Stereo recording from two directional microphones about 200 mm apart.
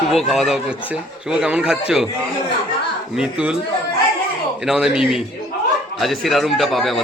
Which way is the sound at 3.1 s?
5° right (ahead or behind).